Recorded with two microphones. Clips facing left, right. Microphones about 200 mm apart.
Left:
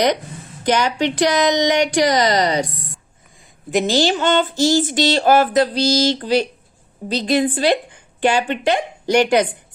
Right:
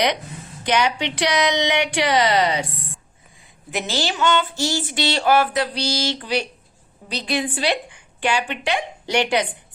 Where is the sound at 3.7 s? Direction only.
45° left (ahead or behind).